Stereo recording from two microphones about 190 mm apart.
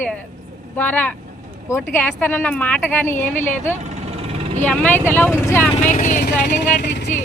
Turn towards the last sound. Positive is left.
turn(degrees=60)  # may be behind; listen again after turning